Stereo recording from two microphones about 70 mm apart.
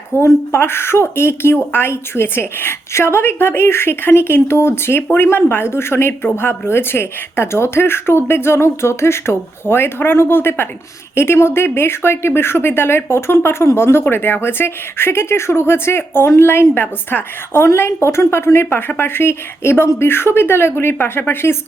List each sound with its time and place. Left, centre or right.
0.1 s speech: left